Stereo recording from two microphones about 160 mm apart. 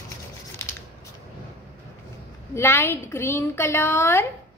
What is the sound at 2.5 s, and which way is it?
A woman's voice, 15° left (ahead or behind).